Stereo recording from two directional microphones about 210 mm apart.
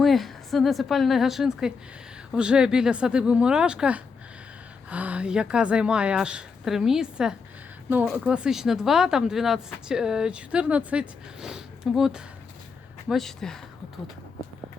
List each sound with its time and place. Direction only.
0.0 s speech: centre (ahead or behind)